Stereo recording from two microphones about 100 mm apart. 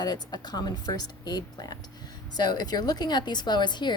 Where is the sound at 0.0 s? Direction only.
45° left (ahead or behind).